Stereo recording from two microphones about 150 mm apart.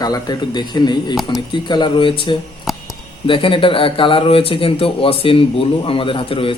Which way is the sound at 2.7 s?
Centre (ahead or behind).